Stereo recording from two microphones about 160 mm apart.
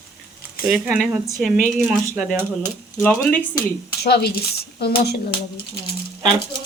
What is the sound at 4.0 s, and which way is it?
Speech, 85° left.